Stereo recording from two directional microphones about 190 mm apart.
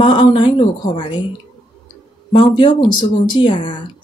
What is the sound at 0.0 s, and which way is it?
Speech, 25° left (ahead or behind).